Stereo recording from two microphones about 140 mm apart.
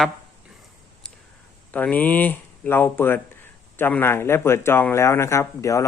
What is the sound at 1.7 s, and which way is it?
Speech, 10° left (ahead or behind).